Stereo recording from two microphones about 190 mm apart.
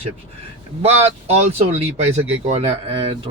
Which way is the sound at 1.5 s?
35° right (ahead or behind).